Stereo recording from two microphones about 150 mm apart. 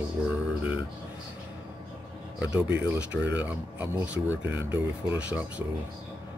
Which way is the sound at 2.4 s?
10° right (ahead or behind).